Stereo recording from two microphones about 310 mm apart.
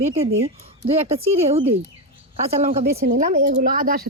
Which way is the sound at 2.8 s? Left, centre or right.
Right.